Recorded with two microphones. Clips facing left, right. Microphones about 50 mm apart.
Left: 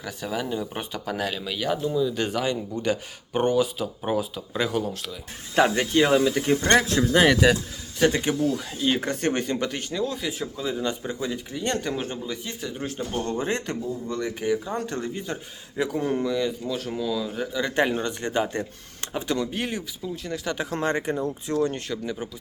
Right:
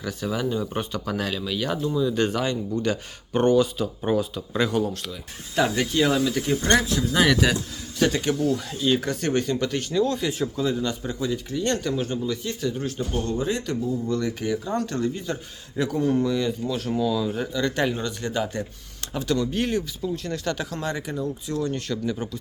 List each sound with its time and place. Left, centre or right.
0.0 s speech: centre
5.5 s speech: left
6.5 s speech: left
7.1 s speech: left; by 8.9 s centre
8.9 s speech: left
10.0 s speech: centre
10.8 s speech: left
13.8 s speech: left
16.2 s speech: centre
17.5 s speech: centre
17.9 s speech: left; by 20.6 s centre
20.6 s speech: left
21.7 s speech: centre